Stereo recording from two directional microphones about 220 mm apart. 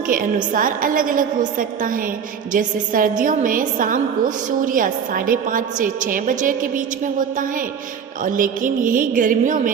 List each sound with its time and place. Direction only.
0.1 s a woman's voice: 40° right (ahead or behind)